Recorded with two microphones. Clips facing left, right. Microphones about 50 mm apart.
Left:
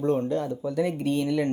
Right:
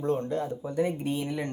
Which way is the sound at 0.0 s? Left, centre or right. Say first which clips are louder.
Left 3 dB; left.